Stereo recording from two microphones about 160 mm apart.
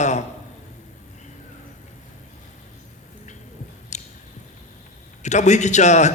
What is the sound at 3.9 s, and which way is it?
Squish, 45° left (ahead or behind).